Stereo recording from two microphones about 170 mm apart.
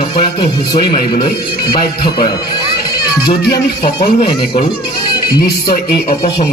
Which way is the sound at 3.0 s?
25° left (ahead or behind).